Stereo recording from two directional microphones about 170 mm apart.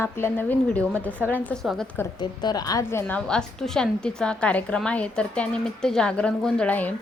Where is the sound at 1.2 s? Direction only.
10° right (ahead or behind).